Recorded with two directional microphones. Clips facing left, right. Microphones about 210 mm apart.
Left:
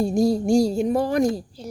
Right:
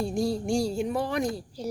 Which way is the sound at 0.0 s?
40° left (ahead or behind).